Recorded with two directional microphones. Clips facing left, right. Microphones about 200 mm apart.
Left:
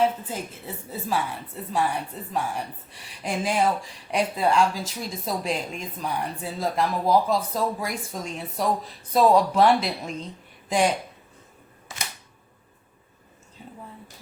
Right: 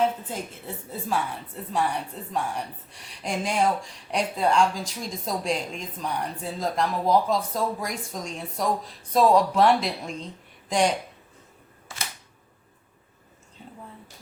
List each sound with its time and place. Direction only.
0.0 s a woman's voice: 5° left (ahead or behind)
1.7 s a woman's voice: 5° left (ahead or behind)
11.9 s camera: 20° left (ahead or behind)